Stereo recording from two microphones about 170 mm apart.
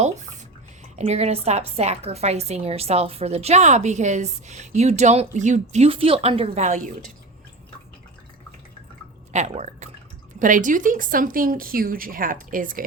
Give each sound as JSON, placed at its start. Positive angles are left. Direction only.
{"t": 0.9, "sound": "a woman's voice", "side_deg": -40}
{"t": 9.3, "sound": "speech", "side_deg": -45}